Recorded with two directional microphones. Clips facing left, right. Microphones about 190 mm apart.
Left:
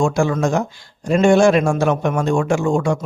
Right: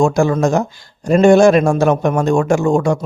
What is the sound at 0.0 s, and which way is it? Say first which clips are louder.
A man's voice: right 4 dB; 40° right (ahead or behind).